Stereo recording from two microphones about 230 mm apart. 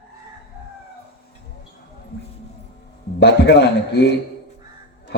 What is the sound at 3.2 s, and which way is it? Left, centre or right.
A man's voice, left.